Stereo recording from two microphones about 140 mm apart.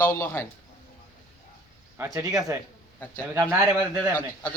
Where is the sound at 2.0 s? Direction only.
25° right (ahead or behind).